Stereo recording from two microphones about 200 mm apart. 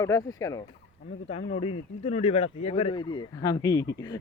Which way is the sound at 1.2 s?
30° left (ahead or behind).